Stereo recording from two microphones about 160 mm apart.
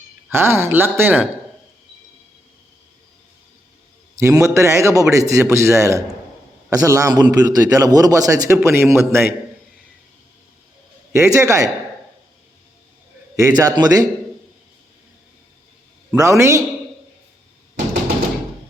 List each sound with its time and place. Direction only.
0.3 s speech: 15° right (ahead or behind)
4.2 s a man's voice: 20° right (ahead or behind)
11.1 s a man's voice: 20° right (ahead or behind)
13.3 s a man's voice: 20° right (ahead or behind)
16.1 s a man's voice: 20° right (ahead or behind)